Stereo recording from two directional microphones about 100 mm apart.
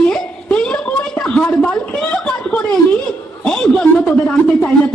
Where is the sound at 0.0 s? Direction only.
15° left (ahead or behind).